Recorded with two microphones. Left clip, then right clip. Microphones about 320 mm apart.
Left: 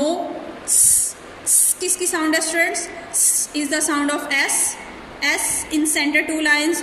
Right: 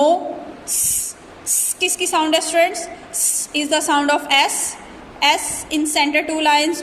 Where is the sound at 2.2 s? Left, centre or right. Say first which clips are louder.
Right 1 dB; centre.